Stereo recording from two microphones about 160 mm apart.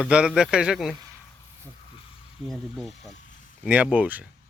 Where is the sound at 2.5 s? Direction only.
Centre (ahead or behind).